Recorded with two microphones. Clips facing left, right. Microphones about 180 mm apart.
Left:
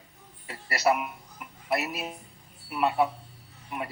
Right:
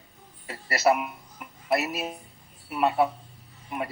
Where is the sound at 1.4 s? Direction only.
30° right (ahead or behind).